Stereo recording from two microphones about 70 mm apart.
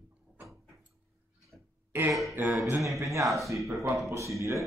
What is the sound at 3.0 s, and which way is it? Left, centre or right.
Speech, right.